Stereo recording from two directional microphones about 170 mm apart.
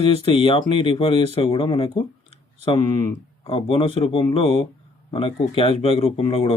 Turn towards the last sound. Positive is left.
turn(degrees=35)  # may be behind; listen again after turning